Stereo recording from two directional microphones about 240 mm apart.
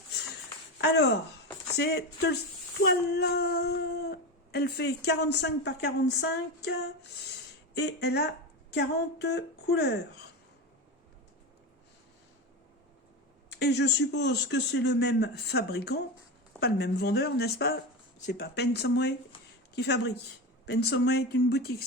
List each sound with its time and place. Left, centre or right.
0.8 s speech: left
13.5 s speech: left